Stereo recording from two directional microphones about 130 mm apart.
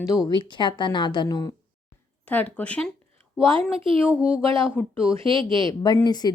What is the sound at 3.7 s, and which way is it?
Speech, 45° right (ahead or behind).